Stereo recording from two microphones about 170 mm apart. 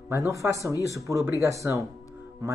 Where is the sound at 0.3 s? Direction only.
20° right (ahead or behind).